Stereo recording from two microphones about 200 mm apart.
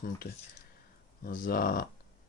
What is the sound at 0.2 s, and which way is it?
Speech, 60° left (ahead or behind).